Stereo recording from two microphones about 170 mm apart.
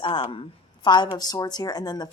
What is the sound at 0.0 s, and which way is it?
Speech, 30° left (ahead or behind).